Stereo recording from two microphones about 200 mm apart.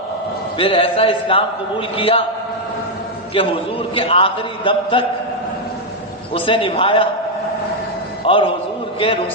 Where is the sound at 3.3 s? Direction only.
30° left (ahead or behind).